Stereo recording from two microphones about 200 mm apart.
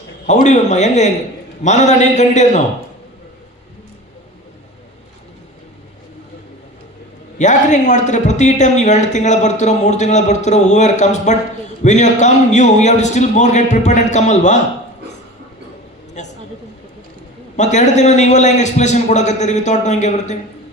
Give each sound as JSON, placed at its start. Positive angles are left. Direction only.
{"t": 0.3, "sound": "a man's voice", "side_deg": 35}
{"t": 7.3, "sound": "a man's voice", "side_deg": 35}
{"t": 16.2, "sound": "a sound", "side_deg": 35}
{"t": 17.6, "sound": "a man's voice", "side_deg": 35}